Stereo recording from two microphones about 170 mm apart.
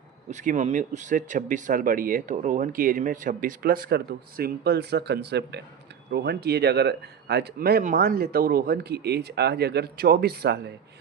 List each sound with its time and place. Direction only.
0.3 s speech: 45° right (ahead or behind); by 5.6 s 85° right
6.1 s speech: 75° right (ahead or behind)